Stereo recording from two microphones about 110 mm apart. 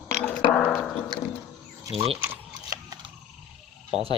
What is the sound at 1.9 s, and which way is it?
Speech, 65° right (ahead or behind).